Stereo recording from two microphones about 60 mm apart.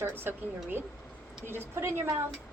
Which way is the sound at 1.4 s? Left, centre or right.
Right.